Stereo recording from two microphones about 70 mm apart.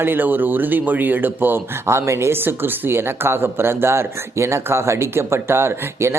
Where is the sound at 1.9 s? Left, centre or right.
Right.